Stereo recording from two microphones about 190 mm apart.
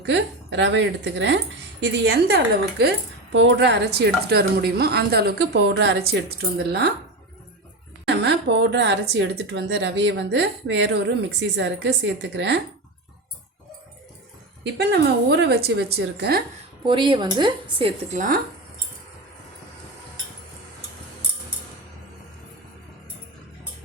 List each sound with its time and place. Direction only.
0.0 s speech: 70° right (ahead or behind)
1.8 s a woman's voice: 55° right (ahead or behind)
3.3 s a woman's voice: 70° right (ahead or behind)
8.0 s speech: 60° right (ahead or behind)
14.8 s a woman's voice: 60° right (ahead or behind)
16.8 s a woman's voice: 25° right (ahead or behind)